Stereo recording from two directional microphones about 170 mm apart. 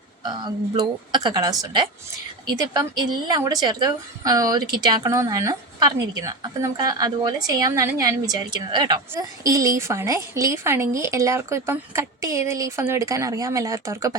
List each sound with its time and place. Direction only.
0.2 s a woman's voice: 25° right (ahead or behind)